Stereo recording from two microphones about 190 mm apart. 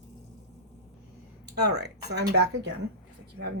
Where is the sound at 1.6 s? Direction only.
60° right (ahead or behind).